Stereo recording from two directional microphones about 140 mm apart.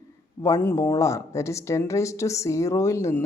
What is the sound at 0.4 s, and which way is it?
A woman's voice, 20° left (ahead or behind).